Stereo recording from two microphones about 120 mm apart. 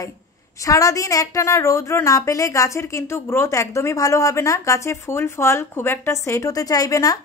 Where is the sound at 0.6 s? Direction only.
25° left (ahead or behind).